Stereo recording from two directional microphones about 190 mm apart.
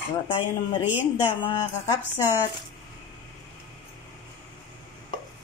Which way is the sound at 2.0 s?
10° right (ahead or behind).